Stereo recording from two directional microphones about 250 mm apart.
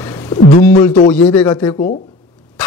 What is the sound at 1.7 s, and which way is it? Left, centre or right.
Speech, left.